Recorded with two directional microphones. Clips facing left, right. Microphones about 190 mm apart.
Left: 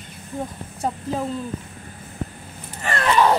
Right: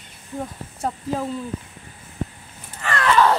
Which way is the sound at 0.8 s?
Centre (ahead or behind).